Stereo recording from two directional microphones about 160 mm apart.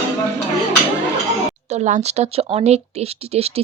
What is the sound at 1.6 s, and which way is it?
A woman's voice, 45° right (ahead or behind).